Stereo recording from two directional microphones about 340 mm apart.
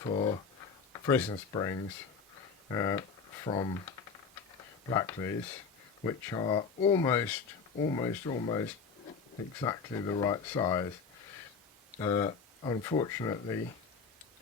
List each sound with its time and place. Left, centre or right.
0.0 s speech: centre
4.9 s speech: centre
11.9 s speech: centre